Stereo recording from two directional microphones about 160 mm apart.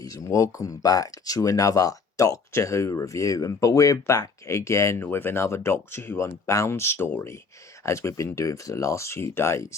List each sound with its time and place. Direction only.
0.0 s speech: 20° left (ahead or behind)